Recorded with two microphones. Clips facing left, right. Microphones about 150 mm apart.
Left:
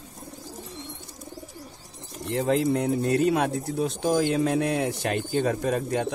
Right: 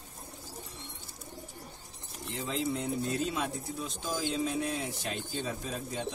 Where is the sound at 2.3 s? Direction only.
70° left (ahead or behind).